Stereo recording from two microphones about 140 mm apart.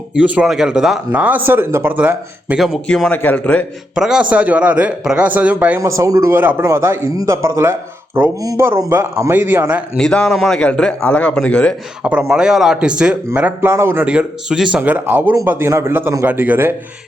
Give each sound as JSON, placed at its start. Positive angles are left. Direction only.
{"t": 0.1, "sound": "speech", "side_deg": -10}
{"t": 3.9, "sound": "speech", "side_deg": -5}
{"t": 5.8, "sound": "speech", "side_deg": -25}
{"t": 10.0, "sound": "a man's voice", "side_deg": 5}
{"t": 12.0, "sound": "speech", "side_deg": -10}